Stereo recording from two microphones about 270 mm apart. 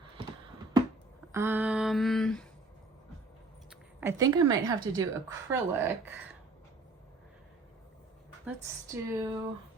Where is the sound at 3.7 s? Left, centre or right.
Centre.